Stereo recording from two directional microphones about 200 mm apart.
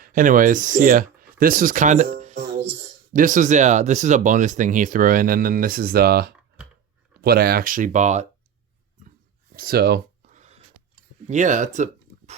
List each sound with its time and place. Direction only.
0.0 s speech: 45° right (ahead or behind)
2.1 s music: 35° right (ahead or behind)
3.1 s speech: 40° right (ahead or behind)
9.6 s a sound: 50° right (ahead or behind)
10.3 s a sound: 35° right (ahead or behind)
11.3 s speech: 40° right (ahead or behind)